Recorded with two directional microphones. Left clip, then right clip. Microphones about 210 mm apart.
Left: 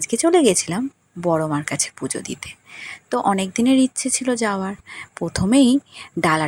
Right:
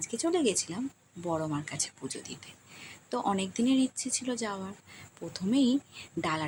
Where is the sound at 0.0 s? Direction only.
35° left (ahead or behind).